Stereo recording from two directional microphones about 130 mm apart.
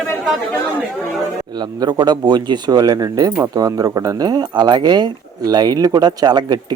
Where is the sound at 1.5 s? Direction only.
30° right (ahead or behind).